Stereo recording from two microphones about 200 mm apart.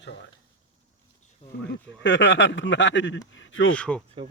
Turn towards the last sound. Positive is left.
turn(degrees=5)  # may be behind; listen again after turning